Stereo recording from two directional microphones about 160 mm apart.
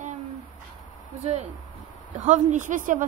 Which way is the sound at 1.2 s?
45° right (ahead or behind).